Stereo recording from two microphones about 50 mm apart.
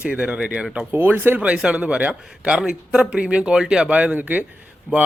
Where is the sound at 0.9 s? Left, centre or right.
Right.